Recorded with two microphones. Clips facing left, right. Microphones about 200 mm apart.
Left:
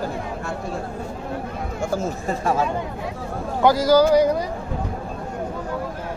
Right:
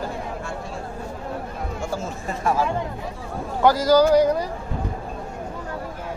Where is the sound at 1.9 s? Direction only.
35° left (ahead or behind).